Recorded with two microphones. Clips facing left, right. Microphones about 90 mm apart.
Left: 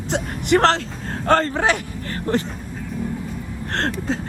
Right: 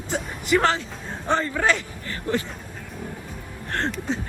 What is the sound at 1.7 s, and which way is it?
Vehicle, 50° left (ahead or behind).